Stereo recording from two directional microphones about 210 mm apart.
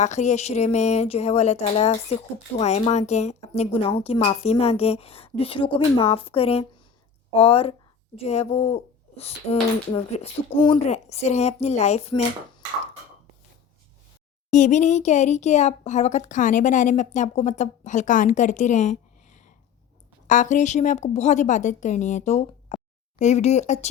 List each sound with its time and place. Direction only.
0.0 s a woman's voice: 35° left (ahead or behind)
14.5 s speech: 35° left (ahead or behind)